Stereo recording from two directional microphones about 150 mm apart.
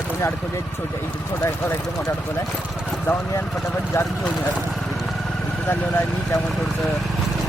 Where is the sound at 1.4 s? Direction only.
15° left (ahead or behind).